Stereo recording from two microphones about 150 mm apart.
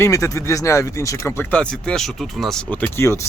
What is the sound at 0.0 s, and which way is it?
Speech, 20° left (ahead or behind).